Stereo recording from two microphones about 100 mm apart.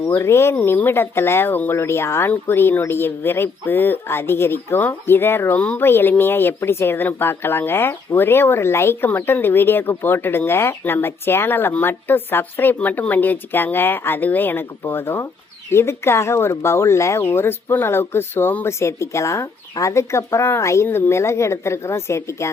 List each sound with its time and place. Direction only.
0.1 s speech: 25° left (ahead or behind)